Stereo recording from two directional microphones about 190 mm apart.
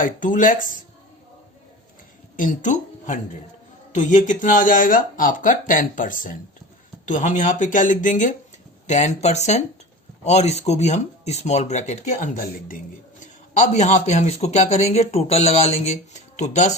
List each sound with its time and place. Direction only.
0.0 s speech: 45° left (ahead or behind)
2.3 s speech: 45° left (ahead or behind)